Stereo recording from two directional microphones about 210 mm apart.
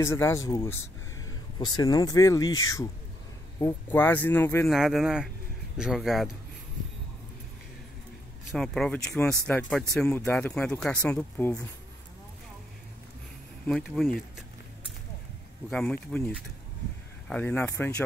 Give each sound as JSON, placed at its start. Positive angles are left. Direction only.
{"t": 0.0, "sound": "speech", "side_deg": 15}
{"t": 4.6, "sound": "speech", "side_deg": 0}
{"t": 8.5, "sound": "speech", "side_deg": 0}
{"t": 13.7, "sound": "speech", "side_deg": 0}
{"t": 15.7, "sound": "speech", "side_deg": 5}